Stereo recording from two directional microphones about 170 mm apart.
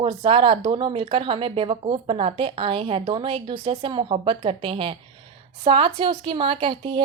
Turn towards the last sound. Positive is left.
turn(degrees=-30)  # may be behind; listen again after turning